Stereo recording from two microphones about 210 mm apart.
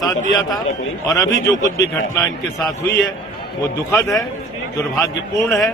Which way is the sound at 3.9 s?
15° left (ahead or behind).